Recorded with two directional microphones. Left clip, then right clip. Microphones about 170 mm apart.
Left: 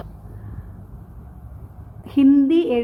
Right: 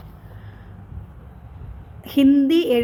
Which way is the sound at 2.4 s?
20° right (ahead or behind).